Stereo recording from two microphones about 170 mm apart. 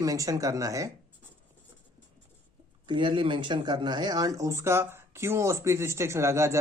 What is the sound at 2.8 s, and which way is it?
Speech, 25° right (ahead or behind).